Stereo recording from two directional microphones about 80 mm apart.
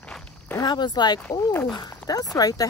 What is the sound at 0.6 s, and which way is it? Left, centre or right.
Speech, left.